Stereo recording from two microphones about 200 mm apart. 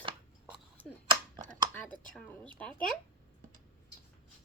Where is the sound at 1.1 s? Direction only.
20° right (ahead or behind).